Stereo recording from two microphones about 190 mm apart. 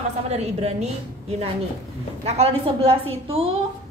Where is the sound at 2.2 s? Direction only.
30° right (ahead or behind).